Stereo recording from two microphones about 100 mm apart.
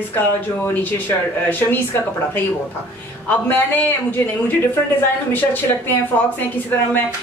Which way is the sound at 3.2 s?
15° left (ahead or behind).